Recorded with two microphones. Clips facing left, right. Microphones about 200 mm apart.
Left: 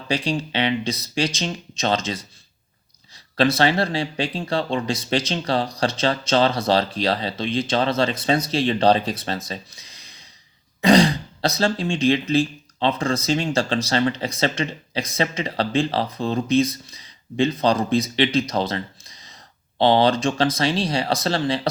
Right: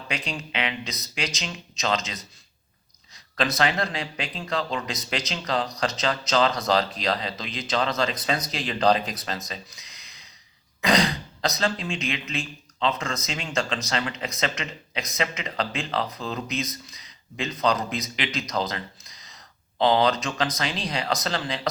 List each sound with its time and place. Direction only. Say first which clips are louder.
0.1 s speech: left 9 dB; 30° left (ahead or behind)
3.3 s speech: left 6 dB; 30° left (ahead or behind)
9.5 s a sound: left 5 dB; 30° left (ahead or behind)
10.8 s speech: left 7 dB; 30° left (ahead or behind)